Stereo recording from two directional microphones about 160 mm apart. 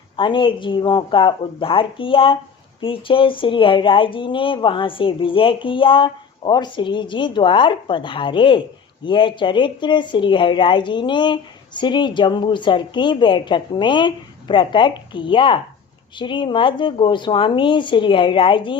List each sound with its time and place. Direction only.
0.2 s speech: 30° left (ahead or behind)